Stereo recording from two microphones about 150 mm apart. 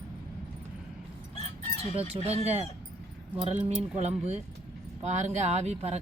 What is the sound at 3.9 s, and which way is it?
Speech, 45° right (ahead or behind).